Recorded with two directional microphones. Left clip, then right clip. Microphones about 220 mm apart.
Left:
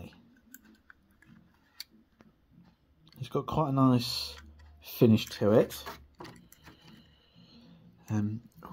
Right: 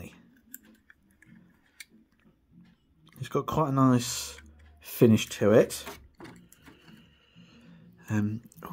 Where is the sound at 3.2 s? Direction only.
15° right (ahead or behind).